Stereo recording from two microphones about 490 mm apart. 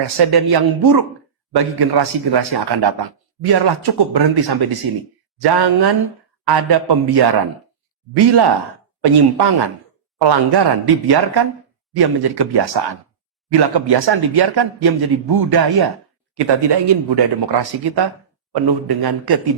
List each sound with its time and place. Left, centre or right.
0.2 s a man's voice: right